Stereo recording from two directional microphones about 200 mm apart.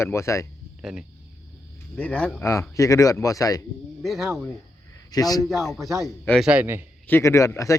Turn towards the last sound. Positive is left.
turn(degrees=15)  # may be behind; listen again after turning